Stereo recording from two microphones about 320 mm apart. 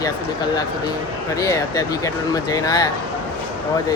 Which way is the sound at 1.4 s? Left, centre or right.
Centre.